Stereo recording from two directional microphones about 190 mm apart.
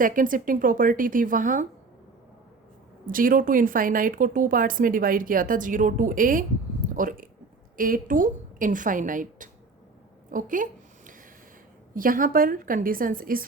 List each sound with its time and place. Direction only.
0.0 s a woman's voice: 45° right (ahead or behind)
3.1 s a woman's voice: 45° right (ahead or behind)
10.3 s a sound: 45° right (ahead or behind)
11.9 s a woman's voice: 45° right (ahead or behind)